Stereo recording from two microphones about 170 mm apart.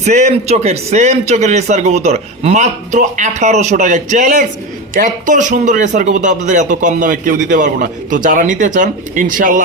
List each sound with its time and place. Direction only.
0.0 s speech: 45° right (ahead or behind)